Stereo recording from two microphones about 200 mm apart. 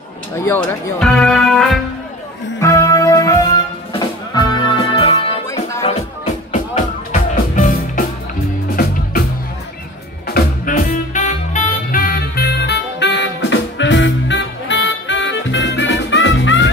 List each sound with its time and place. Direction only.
0.5 s speech: centre (ahead or behind)
2.6 s music: 15° left (ahead or behind)
5.5 s music: 15° left (ahead or behind)
7.2 s music: 45° left (ahead or behind)
10.2 s music: 50° left (ahead or behind); by 16.6 s 70° left (ahead or behind)